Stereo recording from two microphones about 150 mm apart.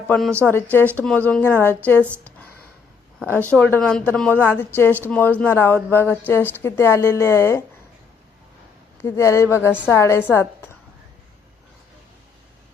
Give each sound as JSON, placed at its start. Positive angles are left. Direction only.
{"t": 0.1, "sound": "a woman's voice", "side_deg": 5}
{"t": 3.5, "sound": "a woman's voice", "side_deg": 10}
{"t": 9.0, "sound": "a woman's voice", "side_deg": 20}